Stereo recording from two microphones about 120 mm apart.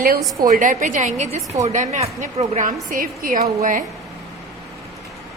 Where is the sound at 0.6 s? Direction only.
90° right.